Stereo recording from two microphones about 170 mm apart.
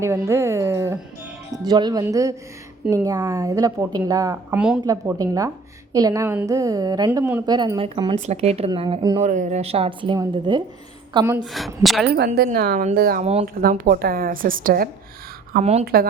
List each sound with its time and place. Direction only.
0.0 s a woman's voice: 15° right (ahead or behind)
4.5 s a woman's voice: 5° right (ahead or behind)
4.9 s a woman's voice: 20° right (ahead or behind)
7.1 s speech: 10° right (ahead or behind)
7.4 s a woman's voice: 25° right (ahead or behind)
9.2 s a woman's voice: 45° right (ahead or behind); by 11.3 s 20° right (ahead or behind)
11.5 s a woman's voice: centre (ahead or behind)
12.1 s speech: 70° right (ahead or behind)
12.8 s a woman's voice: 60° right (ahead or behind)